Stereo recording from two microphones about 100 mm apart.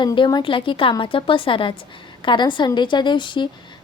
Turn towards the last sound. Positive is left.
turn(degrees=50)  # may be behind; listen again after turning